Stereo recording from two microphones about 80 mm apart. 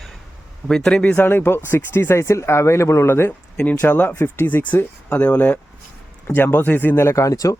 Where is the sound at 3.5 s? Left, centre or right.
Left.